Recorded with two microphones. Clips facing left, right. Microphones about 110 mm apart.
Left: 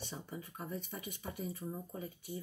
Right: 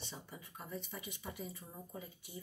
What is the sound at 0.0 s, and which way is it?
Speech, 50° left (ahead or behind).